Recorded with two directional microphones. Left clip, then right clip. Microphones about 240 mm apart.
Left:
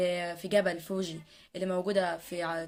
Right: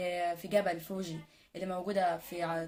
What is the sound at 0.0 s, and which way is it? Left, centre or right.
A woman's voice, left.